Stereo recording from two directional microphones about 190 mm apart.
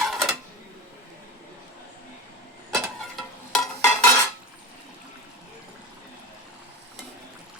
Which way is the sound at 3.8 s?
10° left (ahead or behind).